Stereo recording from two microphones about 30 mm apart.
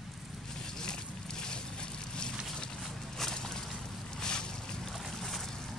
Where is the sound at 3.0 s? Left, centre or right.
Centre.